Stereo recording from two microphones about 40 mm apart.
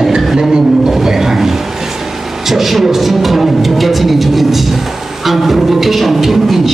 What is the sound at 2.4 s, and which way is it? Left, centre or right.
Music, centre.